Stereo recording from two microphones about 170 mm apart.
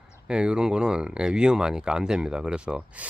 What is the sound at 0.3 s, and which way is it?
Speech, 5° right (ahead or behind).